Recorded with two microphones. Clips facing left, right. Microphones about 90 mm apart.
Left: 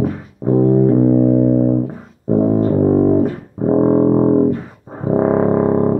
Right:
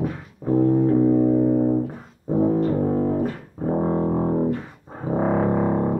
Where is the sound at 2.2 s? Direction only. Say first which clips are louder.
Left 5 dB; 30° left (ahead or behind).